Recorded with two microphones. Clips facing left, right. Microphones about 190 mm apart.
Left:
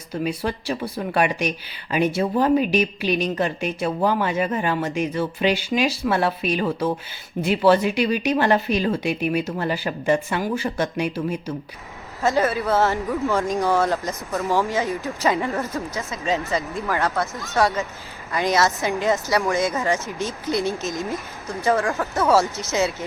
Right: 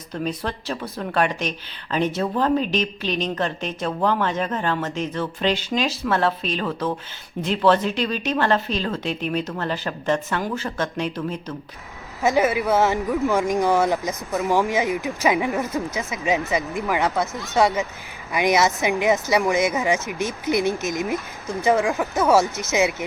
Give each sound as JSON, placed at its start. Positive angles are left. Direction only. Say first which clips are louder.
{"t": 0.1, "sound": "speech", "louder": "left 2 dB", "side_deg": 10}
{"t": 12.2, "sound": "speech", "louder": "right 1 dB", "side_deg": -15}